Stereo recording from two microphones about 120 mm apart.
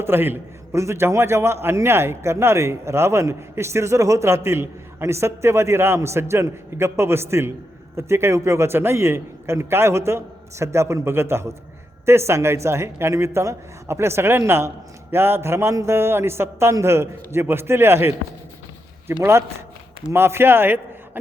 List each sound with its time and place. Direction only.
0.0 s a man's voice: 20° right (ahead or behind)
19.2 s a man's voice: 20° right (ahead or behind)